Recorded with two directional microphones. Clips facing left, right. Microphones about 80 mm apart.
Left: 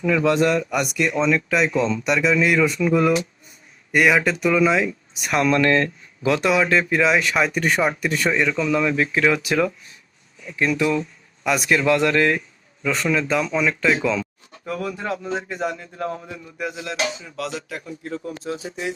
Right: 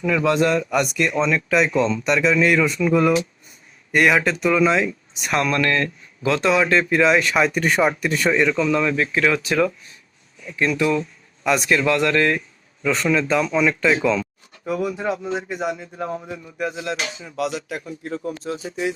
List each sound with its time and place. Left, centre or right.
0.7 s speech: centre
5.4 s speech: left
6.5 s speech: centre
8.5 s speech: centre
12.8 s speech: centre
14.7 s speech: centre
18.4 s speech: centre